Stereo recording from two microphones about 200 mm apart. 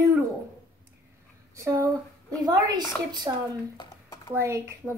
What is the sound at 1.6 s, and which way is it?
A woman's voice, 10° right (ahead or behind).